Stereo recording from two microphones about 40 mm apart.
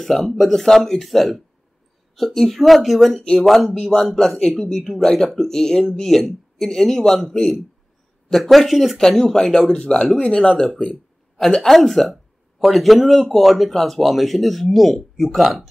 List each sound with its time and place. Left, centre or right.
0.0 s speech: centre
9.2 s speech: centre
11.3 s speech: centre